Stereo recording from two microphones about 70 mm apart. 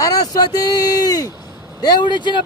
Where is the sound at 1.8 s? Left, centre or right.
Left.